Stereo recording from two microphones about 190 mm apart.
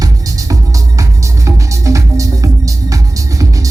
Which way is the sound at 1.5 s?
15° right (ahead or behind).